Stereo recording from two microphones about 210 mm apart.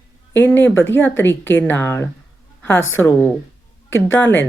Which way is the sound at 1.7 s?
10° left (ahead or behind).